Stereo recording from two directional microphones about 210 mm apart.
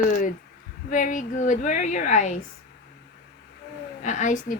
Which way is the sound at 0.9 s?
40° left (ahead or behind).